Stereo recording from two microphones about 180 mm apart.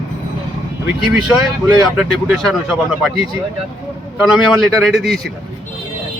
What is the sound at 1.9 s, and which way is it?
Speech, 5° right (ahead or behind).